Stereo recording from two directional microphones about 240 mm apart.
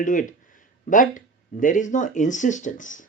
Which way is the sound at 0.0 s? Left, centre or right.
Left.